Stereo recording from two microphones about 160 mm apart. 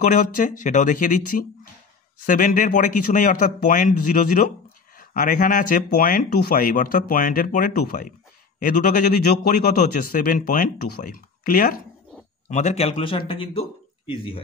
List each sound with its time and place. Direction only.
0.1 s speech: 55° left (ahead or behind)
12.4 s a man's voice: 45° left (ahead or behind)